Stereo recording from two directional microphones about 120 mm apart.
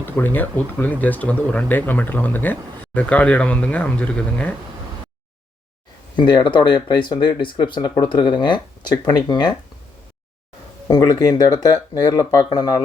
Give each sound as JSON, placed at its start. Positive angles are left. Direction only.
{"t": 0.0, "sound": "speech", "side_deg": 15}
{"t": 6.1, "sound": "speech", "side_deg": 40}
{"t": 10.8, "sound": "speech", "side_deg": 35}